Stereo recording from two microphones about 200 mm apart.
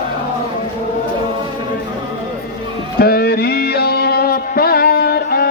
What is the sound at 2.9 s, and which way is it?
Music, 50° left (ahead or behind).